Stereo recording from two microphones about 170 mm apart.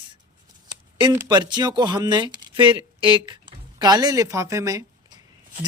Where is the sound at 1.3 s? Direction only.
25° right (ahead or behind).